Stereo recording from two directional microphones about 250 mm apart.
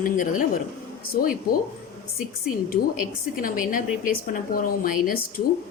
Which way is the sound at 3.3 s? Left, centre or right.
Left.